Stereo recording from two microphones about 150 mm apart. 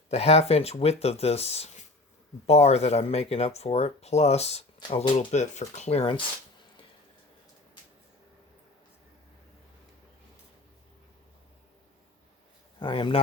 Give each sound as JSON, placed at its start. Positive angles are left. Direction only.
{"t": 0.1, "sound": "speech", "side_deg": 45}
{"t": 12.8, "sound": "speech", "side_deg": 35}